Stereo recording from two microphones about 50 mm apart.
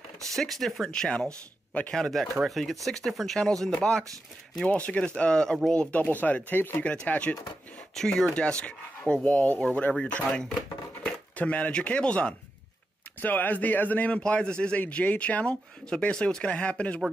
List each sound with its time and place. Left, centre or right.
0.3 s speech: centre
0.8 s speech: centre
2.0 s speech: centre
4.6 s speech: left
7.9 s speech: centre
8.4 s speech: centre
9.2 s speech: left
13.2 s speech: left
14.2 s speech: centre
14.8 s speech: left